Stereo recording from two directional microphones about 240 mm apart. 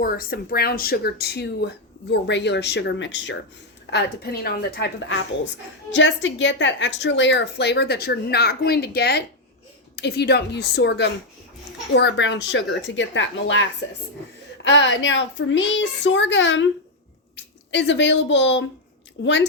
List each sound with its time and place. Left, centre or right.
0.0 s speech: left